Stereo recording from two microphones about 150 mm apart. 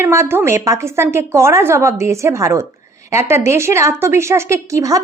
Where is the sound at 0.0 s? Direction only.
15° right (ahead or behind).